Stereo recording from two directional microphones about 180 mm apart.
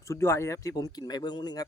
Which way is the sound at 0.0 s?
15° left (ahead or behind).